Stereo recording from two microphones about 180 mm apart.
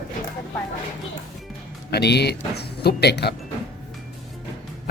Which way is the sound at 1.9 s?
65° left (ahead or behind).